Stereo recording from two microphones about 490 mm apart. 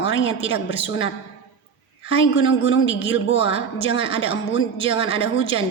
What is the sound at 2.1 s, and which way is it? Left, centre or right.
Speech, left.